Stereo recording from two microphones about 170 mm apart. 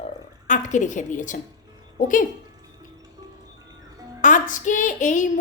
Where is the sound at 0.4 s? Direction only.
50° left (ahead or behind).